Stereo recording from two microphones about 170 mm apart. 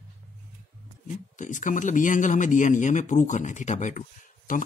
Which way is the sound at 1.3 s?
50° left (ahead or behind).